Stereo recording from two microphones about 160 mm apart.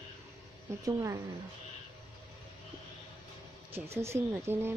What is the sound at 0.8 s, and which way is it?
Speech, 20° right (ahead or behind).